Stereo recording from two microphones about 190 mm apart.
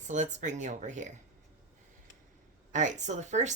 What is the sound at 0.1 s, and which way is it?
Speech, 40° right (ahead or behind).